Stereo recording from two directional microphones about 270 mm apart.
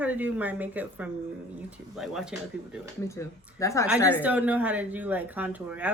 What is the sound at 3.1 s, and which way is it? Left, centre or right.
Speech, centre.